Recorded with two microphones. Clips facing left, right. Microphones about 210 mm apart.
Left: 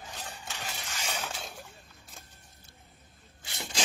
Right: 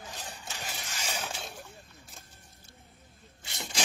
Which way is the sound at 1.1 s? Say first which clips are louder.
Right 1 dB; 5° right (ahead or behind).